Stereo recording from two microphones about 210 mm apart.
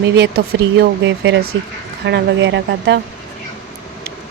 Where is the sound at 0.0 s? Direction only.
50° right (ahead or behind).